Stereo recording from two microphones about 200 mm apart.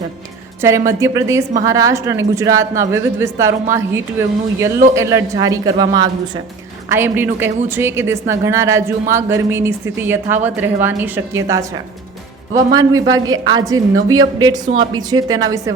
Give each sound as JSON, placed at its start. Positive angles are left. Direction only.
{"t": 0.6, "sound": "a woman's voice", "side_deg": -15}